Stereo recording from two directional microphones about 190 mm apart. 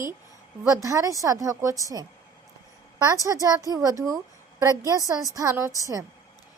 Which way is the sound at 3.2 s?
15° right (ahead or behind).